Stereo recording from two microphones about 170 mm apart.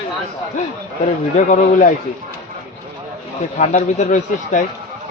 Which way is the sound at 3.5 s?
45° left (ahead or behind).